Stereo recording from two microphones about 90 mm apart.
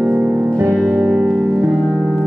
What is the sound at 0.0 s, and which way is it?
Music, 5° right (ahead or behind).